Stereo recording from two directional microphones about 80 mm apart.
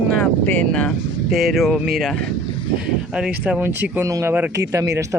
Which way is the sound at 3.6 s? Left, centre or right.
Right.